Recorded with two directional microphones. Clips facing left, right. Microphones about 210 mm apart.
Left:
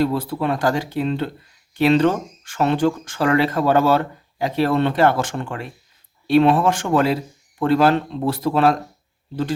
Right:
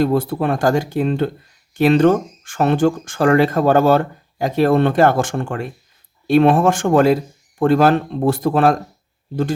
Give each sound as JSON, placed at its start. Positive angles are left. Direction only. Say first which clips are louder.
{"t": 0.0, "sound": "speech", "louder": "right 3 dB", "side_deg": -50}